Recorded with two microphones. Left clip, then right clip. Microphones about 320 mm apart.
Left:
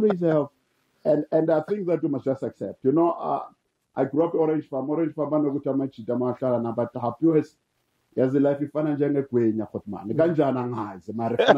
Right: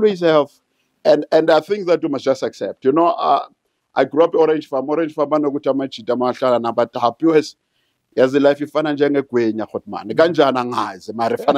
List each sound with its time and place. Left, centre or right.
0.0 s speech: centre